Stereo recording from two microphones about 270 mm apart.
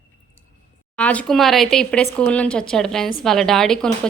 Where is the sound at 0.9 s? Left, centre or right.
Centre.